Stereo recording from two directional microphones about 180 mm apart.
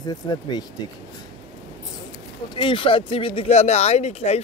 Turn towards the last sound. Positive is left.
turn(degrees=35)  # may be behind; listen again after turning